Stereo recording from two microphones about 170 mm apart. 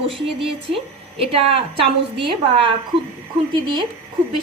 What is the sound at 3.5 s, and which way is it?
Speech, 30° right (ahead or behind).